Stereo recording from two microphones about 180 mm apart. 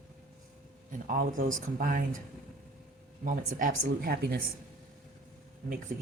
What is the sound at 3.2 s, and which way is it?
Speech, 50° right (ahead or behind).